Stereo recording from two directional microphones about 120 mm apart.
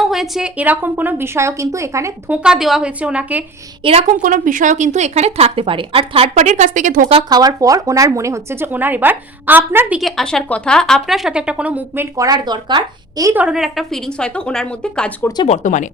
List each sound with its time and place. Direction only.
0.0 s speech: 5° right (ahead or behind); by 2.3 s 25° right (ahead or behind)
2.3 s a woman's voice: 5° right (ahead or behind)
4.1 s speech: 90° right
7.2 s speech: 35° right (ahead or behind); by 10.0 s 15° right (ahead or behind)
10.0 s a woman's voice: centre (ahead or behind)
12.1 s speech: 30° right (ahead or behind)
13.3 s a woman's voice: 5° right (ahead or behind); by 15.1 s 10° left (ahead or behind)
15.4 s speech: 85° left